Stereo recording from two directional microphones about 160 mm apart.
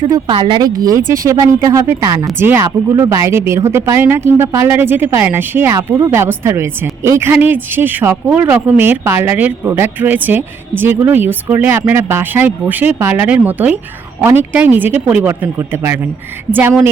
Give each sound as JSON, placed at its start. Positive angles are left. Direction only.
{"t": 0.0, "sound": "speech", "side_deg": -30}